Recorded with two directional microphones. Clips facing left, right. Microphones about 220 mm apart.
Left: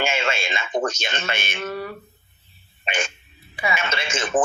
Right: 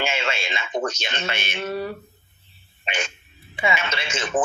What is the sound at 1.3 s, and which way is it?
Speech, 50° left (ahead or behind).